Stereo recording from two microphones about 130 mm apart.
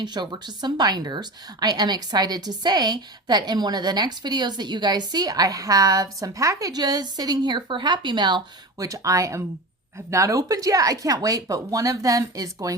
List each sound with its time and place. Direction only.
0.0 s a woman's voice: 35° right (ahead or behind)